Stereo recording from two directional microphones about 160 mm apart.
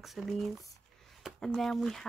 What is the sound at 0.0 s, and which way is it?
Speech, centre (ahead or behind).